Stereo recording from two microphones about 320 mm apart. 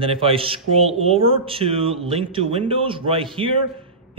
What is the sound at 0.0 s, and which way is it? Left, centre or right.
A man's voice, centre.